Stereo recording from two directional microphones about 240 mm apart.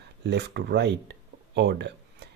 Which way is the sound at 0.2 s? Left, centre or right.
Right.